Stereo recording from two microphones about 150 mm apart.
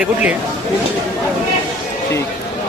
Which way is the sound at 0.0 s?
10° right (ahead or behind).